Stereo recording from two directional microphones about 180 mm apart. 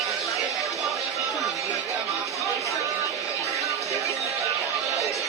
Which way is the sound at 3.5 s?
15° right (ahead or behind).